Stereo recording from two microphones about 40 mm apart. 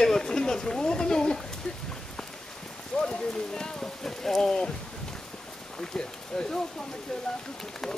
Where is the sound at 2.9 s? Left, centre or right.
Centre.